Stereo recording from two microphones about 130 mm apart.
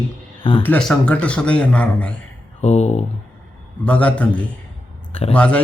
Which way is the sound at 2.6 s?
60° left (ahead or behind).